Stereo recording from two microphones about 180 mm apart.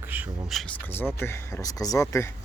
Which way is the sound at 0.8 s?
10° left (ahead or behind).